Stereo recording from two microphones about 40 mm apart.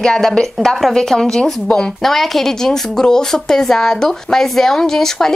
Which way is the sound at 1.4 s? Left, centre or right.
Left.